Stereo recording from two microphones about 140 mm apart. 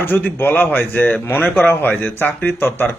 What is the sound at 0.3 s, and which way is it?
A man's voice, 15° left (ahead or behind).